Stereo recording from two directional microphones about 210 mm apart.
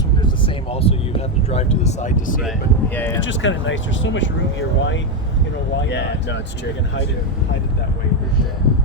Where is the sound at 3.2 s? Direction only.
60° left (ahead or behind).